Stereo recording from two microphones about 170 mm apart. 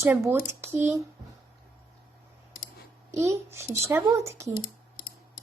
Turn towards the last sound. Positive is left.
turn(degrees=-15)  # may be behind; listen again after turning